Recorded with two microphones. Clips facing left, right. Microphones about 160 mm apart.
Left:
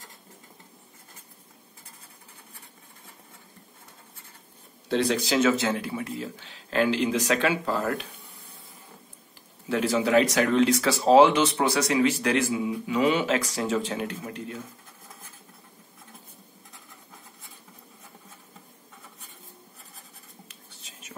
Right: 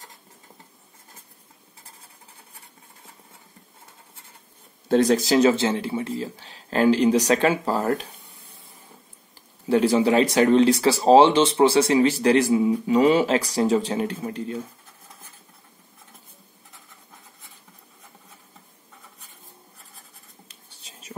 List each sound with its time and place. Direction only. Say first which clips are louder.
4.8 s speech: right 6 dB; 45° right (ahead or behind)
9.7 s speech: right 5 dB; 35° right (ahead or behind)
20.4 s writing: left 1 dB; 30° right (ahead or behind)